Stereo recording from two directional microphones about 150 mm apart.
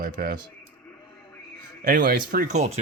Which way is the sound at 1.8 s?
75° right (ahead or behind).